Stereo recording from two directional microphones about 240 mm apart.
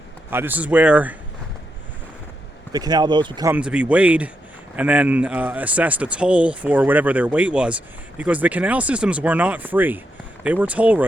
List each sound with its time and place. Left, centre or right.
0.3 s a man's voice: centre
2.7 s a man's voice: centre
3.5 s speech: centre